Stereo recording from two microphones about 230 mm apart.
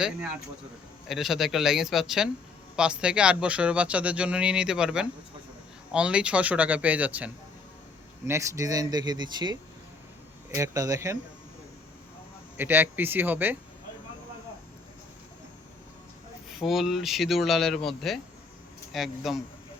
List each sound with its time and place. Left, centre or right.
1.0 s speech: centre
8.3 s speech: centre
12.5 s speech: centre
16.5 s speech: centre